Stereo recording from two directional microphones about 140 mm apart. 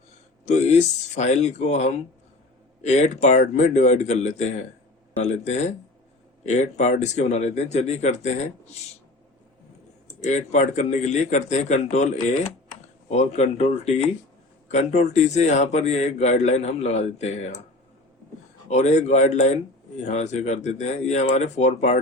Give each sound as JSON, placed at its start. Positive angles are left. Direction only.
{"t": 0.4, "sound": "a man's voice", "side_deg": 55}
{"t": 10.2, "sound": "a man's voice", "side_deg": 60}
{"t": 18.7, "sound": "a man's voice", "side_deg": 55}